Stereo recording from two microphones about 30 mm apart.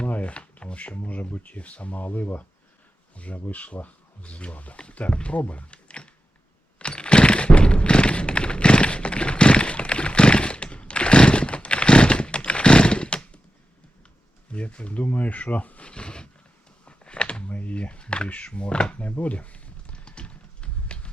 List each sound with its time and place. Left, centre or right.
0.1 s a sound: left
1.0 s speech: left
3.3 s speech: left
4.2 s speech: left
6.7 s thunk: left
14.5 s speech: left
15.8 s a sound: left
17.5 s speech: left
17.7 s speech: left
19.2 s a sound: left